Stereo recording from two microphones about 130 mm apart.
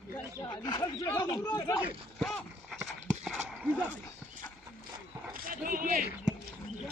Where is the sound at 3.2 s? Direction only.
5° right (ahead or behind).